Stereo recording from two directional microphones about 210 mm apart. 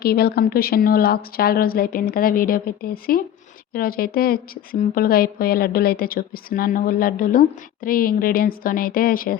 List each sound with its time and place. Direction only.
0.0 s a woman's voice: 50° left (ahead or behind)